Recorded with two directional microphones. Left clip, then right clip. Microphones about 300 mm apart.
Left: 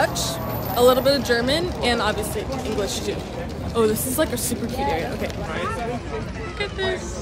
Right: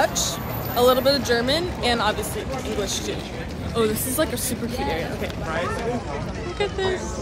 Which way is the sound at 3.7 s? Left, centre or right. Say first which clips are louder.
Left 2 dB; centre.